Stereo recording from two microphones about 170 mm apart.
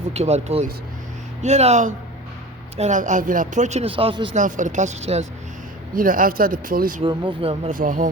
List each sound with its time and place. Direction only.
0.1 s speech: 40° right (ahead or behind)
4.4 s speech: 50° right (ahead or behind)
5.9 s speech: 55° right (ahead or behind)
7.0 s speech: 30° right (ahead or behind)
7.7 s speech: 50° right (ahead or behind)